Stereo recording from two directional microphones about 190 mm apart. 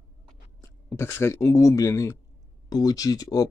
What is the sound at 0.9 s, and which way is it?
Speech, 15° left (ahead or behind).